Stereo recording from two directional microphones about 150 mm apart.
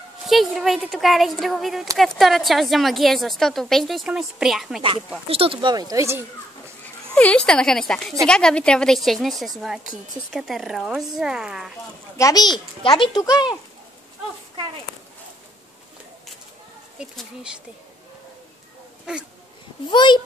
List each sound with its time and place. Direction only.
0.3 s a woman's voice: centre (ahead or behind)
5.3 s speech: 40° right (ahead or behind); by 6.2 s 20° right (ahead or behind)
7.2 s a woman's voice: 10° left (ahead or behind)
12.2 s a child's voice: 25° left (ahead or behind)
17.0 s a woman's voice: centre (ahead or behind)
19.1 s a woman's voice: 5° right (ahead or behind)
19.9 s a child's voice: 30° left (ahead or behind)